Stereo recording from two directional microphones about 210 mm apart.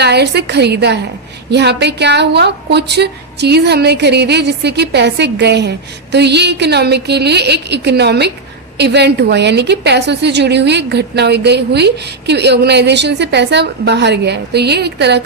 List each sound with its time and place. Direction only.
0.0 s a woman's voice: 50° right (ahead or behind)